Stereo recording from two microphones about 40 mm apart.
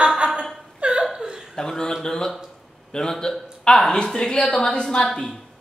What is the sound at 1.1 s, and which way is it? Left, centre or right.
Chuckle, centre.